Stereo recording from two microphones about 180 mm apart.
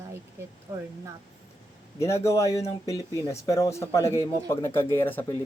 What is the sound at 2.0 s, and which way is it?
Speech, 15° left (ahead or behind).